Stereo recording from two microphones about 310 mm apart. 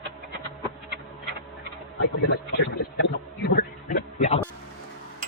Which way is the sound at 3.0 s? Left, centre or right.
Left.